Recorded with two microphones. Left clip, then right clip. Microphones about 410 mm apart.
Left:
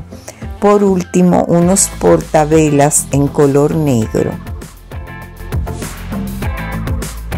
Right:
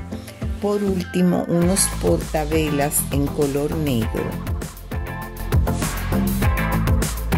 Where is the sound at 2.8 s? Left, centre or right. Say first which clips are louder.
Left 10 dB; right.